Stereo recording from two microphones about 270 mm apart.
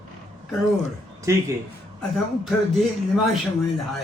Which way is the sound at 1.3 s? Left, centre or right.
Centre.